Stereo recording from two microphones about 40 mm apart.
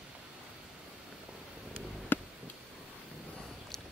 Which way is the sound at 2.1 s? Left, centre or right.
Left.